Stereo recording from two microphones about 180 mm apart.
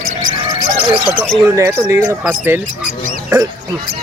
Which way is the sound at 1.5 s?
15° right (ahead or behind).